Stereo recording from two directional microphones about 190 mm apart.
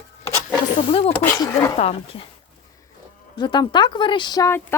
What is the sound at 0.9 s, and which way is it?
Speech, 30° left (ahead or behind).